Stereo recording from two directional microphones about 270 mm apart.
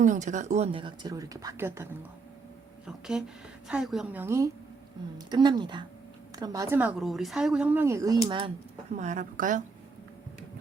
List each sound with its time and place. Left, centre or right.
0.0 s a woman's voice: right